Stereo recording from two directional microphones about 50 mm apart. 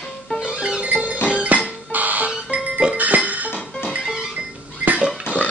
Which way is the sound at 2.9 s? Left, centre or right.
Right.